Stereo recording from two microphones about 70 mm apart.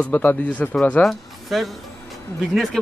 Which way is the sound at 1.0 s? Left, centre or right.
Centre.